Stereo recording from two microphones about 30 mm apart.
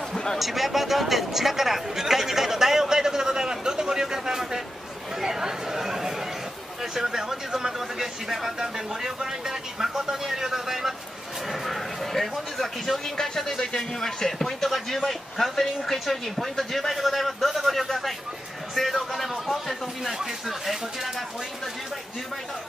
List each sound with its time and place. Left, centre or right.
0.4 s speech: centre
5.2 s chatter: centre
6.8 s speech: centre
11.4 s speech: centre
18.8 s a sound: centre
20.0 s speech: centre